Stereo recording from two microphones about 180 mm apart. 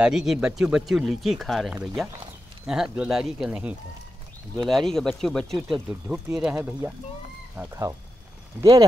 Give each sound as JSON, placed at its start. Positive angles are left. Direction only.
{"t": 0.0, "sound": "speech", "side_deg": -5}